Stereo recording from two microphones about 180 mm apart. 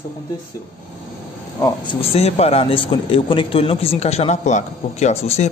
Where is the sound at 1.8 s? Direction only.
30° left (ahead or behind).